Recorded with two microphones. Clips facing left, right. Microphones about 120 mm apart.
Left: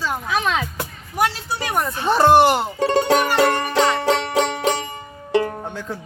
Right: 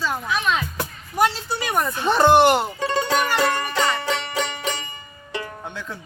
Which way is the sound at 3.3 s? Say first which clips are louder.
Left 4 dB; 65° left (ahead or behind).